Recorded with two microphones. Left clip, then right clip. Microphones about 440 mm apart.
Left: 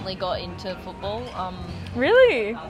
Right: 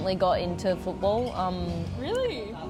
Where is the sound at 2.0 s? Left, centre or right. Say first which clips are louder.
Left 13 dB; left.